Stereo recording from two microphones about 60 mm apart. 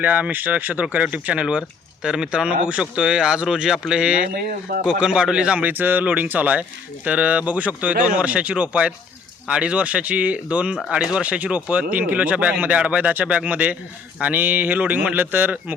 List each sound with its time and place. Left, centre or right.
0.0 s speech: right
5.6 s speech: right